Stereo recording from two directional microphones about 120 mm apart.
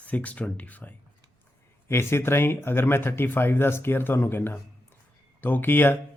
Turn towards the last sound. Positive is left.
turn(degrees=15)  # may be behind; listen again after turning